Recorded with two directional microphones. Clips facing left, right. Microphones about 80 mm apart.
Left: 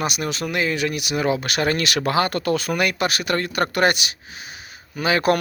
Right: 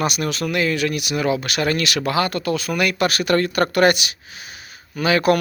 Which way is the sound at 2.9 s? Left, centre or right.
Centre.